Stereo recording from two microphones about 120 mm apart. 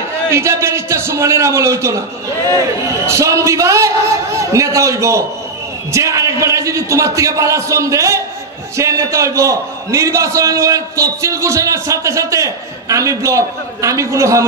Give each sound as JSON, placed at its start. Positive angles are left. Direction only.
{"t": 0.3, "sound": "a man's voice", "side_deg": -20}
{"t": 3.1, "sound": "a man's voice", "side_deg": -25}